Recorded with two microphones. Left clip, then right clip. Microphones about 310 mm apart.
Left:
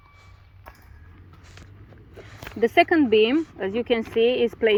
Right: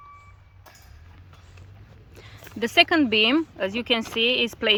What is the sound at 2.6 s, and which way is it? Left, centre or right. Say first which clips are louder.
Speech: left 1 dB; centre.